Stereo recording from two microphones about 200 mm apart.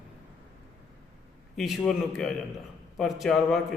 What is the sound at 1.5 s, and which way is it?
A man's voice, centre (ahead or behind).